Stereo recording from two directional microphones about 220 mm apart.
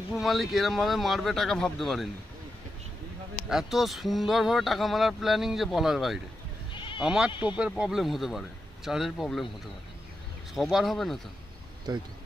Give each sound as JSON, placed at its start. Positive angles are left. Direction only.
{"t": 0.1, "sound": "speech", "side_deg": 0}
{"t": 3.4, "sound": "speech", "side_deg": 0}
{"t": 6.7, "sound": "bleat", "side_deg": 20}
{"t": 7.0, "sound": "speech", "side_deg": -5}
{"t": 10.5, "sound": "speech", "side_deg": 0}